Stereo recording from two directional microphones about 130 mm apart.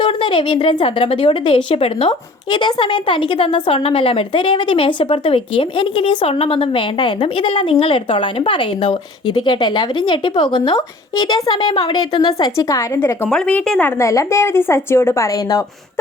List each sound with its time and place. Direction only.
0.0 s a woman's voice: 40° left (ahead or behind); by 13.3 s 15° left (ahead or behind)
13.3 s a woman's voice: 5° left (ahead or behind); by 15.6 s 25° left (ahead or behind)